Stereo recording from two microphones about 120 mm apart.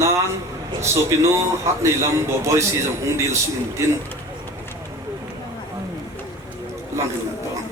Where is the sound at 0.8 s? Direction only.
25° right (ahead or behind).